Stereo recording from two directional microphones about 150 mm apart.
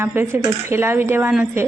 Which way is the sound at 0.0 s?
15° right (ahead or behind).